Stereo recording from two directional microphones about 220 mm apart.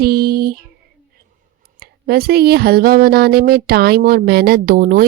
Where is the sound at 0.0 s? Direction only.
45° right (ahead or behind).